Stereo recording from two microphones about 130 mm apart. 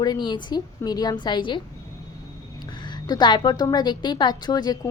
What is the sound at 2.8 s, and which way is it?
A woman's voice, 35° left (ahead or behind).